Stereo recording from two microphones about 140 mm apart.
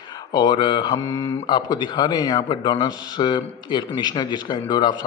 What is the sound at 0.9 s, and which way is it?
Speech, 20° left (ahead or behind).